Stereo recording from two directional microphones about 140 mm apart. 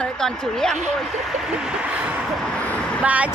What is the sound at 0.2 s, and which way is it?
Speech, 5° left (ahead or behind).